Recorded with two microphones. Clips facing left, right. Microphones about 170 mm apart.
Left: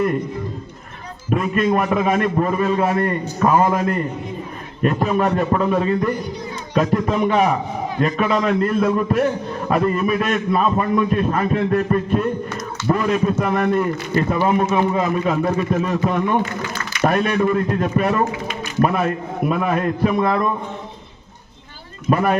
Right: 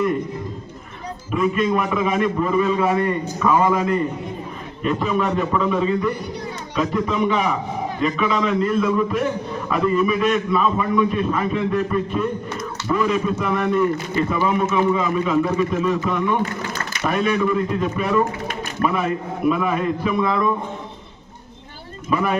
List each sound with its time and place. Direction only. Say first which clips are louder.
1.3 s a man's voice: left 1 dB; 50° left (ahead or behind)
22.1 s a man's voice: left 3 dB; 50° left (ahead or behind)